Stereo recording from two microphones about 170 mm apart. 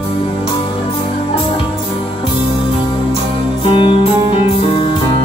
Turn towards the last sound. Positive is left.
turn(degrees=30)  # may be behind; listen again after turning